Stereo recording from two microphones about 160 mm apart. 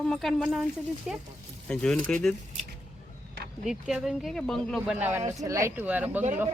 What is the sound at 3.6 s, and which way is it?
Speech, 5° right (ahead or behind).